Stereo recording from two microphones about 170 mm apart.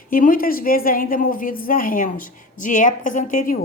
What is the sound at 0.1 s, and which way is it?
A woman's voice, 55° left (ahead or behind).